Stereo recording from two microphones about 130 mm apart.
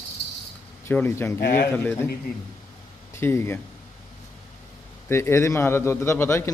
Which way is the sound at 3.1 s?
20° left (ahead or behind).